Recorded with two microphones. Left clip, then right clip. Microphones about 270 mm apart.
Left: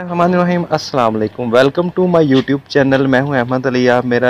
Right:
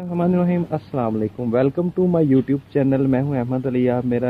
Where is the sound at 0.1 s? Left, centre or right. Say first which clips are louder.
Left 8 dB; centre.